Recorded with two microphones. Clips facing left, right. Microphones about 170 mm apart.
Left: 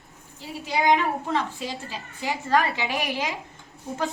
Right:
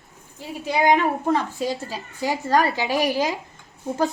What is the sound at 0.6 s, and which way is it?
A woman's voice, 50° right (ahead or behind).